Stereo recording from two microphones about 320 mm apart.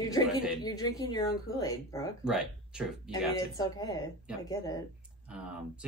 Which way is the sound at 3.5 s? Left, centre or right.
Centre.